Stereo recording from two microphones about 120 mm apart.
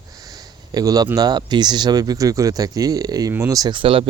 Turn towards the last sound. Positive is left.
turn(degrees=-50)  # may be behind; listen again after turning